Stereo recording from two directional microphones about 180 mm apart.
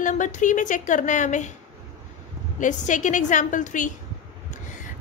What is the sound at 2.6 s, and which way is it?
A woman's voice, 45° left (ahead or behind).